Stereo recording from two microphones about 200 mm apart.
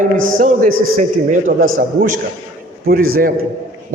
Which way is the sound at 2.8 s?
50° right (ahead or behind).